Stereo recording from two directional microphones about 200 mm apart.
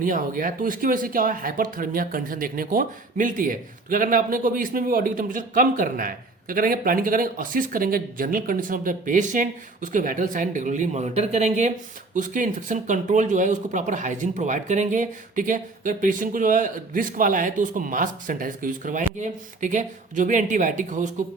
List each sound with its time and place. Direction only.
0.0 s speech: 45° right (ahead or behind)